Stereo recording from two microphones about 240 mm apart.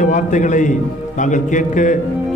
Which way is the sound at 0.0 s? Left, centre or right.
Left.